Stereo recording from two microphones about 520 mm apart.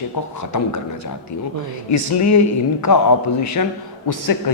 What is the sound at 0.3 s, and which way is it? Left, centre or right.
A woman's voice, left.